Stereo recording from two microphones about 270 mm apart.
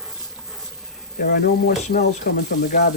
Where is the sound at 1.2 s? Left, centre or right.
Left.